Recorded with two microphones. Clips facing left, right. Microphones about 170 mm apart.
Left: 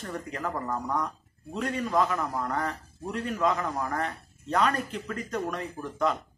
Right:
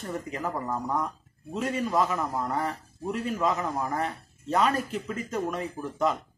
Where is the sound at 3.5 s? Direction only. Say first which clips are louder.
Right 1 dB; 20° right (ahead or behind).